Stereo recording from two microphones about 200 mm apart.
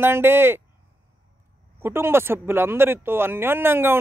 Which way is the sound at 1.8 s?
10° right (ahead or behind).